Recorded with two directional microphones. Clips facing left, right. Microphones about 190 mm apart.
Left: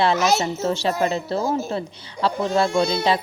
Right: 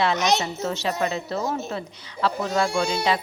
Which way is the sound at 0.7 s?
30° left (ahead or behind).